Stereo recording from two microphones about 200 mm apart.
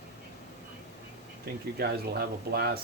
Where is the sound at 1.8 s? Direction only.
50° right (ahead or behind).